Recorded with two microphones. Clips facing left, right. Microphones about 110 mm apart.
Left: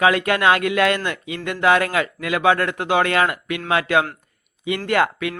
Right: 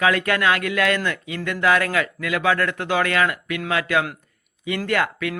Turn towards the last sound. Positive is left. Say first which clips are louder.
# left 3 dB
turn(degrees=25)  # may be behind; listen again after turning